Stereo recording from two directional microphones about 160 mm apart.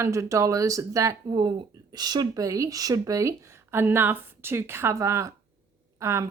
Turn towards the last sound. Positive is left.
turn(degrees=-20)  # may be behind; listen again after turning